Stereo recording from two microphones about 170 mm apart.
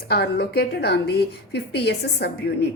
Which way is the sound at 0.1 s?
70° left (ahead or behind).